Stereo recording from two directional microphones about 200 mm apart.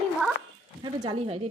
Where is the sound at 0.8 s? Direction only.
25° right (ahead or behind).